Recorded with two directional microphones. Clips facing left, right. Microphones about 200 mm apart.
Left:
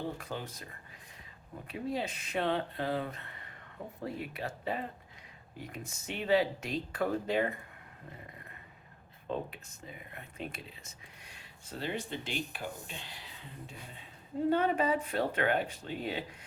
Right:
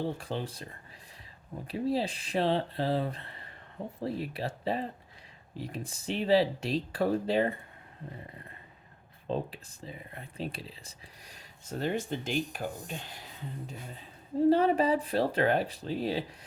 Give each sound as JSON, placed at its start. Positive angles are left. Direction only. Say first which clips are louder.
{"t": 0.2, "sound": "speech", "louder": "right 5 dB", "side_deg": -30}
{"t": 1.6, "sound": "speech", "louder": "right 5 dB", "side_deg": -35}
{"t": 9.2, "sound": "speech", "louder": "right 3 dB", "side_deg": -30}